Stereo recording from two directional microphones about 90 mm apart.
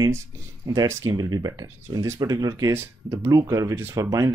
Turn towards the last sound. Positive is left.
turn(degrees=-40)  # may be behind; listen again after turning